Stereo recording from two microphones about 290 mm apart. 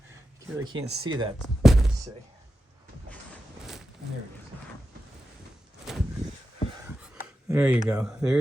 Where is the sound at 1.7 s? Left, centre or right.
Centre.